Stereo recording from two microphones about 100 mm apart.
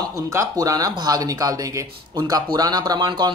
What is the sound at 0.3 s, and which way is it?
Speech, 35° right (ahead or behind).